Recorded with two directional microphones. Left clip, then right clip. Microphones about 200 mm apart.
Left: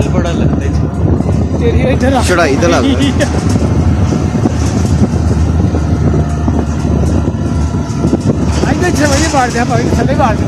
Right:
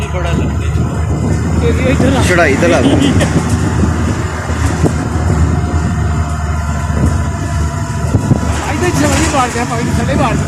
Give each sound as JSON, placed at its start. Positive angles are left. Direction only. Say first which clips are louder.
{"t": 2.3, "sound": "speech", "louder": "right 1 dB", "side_deg": 10}
{"t": 10.1, "sound": "speech", "louder": "left 2 dB", "side_deg": 45}